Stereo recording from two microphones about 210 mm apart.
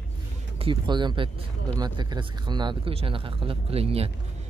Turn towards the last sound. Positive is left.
turn(degrees=-30)  # may be behind; listen again after turning